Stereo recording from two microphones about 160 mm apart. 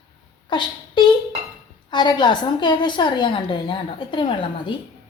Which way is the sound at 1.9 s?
30° left (ahead or behind).